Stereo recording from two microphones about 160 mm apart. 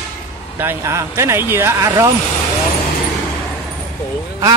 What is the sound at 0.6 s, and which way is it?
Speech, 15° right (ahead or behind).